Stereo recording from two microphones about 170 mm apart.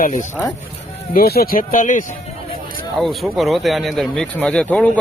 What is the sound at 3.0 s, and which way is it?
Speech, centre (ahead or behind).